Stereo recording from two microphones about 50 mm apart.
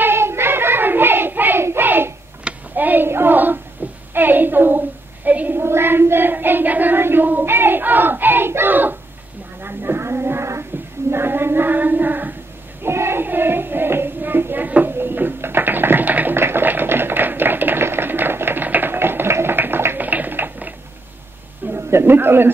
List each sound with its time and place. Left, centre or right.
0.0 s child singing: right
1.6 s hands: right
2.7 s a sound: right
3.1 s child singing: right
4.1 s a sound: right
5.6 s child singing: right
7.0 s child singing: right
7.4 s hands: right
9.6 s a sound: right
12.8 s child singing: right
13.2 s music: right
16.3 s tap: right
20.0 s a sound: right